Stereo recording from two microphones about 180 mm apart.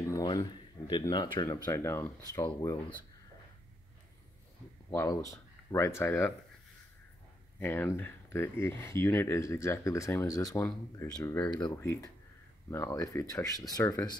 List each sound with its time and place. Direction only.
0.0 s speech: 20° left (ahead or behind)
4.9 s speech: 20° left (ahead or behind)
7.6 s speech: 15° left (ahead or behind)